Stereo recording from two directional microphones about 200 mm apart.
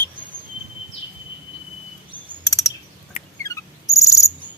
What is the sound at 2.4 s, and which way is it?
Chirp, 15° left (ahead or behind).